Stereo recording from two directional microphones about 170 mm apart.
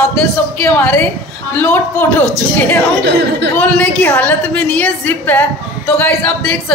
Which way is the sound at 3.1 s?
90° right.